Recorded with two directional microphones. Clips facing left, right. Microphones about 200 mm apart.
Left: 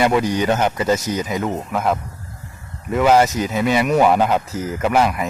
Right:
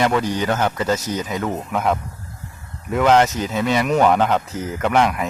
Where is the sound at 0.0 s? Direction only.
15° left (ahead or behind).